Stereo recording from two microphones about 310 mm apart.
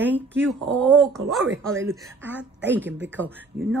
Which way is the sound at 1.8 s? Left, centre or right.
Centre.